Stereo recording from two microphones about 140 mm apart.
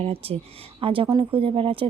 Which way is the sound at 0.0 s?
45° right (ahead or behind).